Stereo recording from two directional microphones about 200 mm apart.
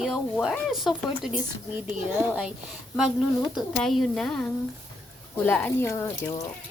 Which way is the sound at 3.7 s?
Centre (ahead or behind).